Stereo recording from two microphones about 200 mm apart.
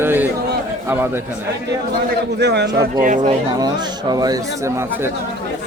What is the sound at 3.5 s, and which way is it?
Speech, 20° right (ahead or behind).